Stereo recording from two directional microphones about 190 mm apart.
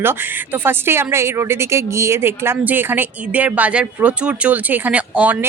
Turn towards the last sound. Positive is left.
turn(degrees=-10)  # may be behind; listen again after turning